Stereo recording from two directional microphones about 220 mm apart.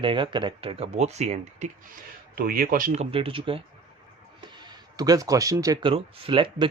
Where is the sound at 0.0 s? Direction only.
20° right (ahead or behind).